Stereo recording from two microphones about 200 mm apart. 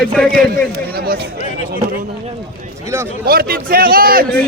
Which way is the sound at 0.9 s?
50° right (ahead or behind).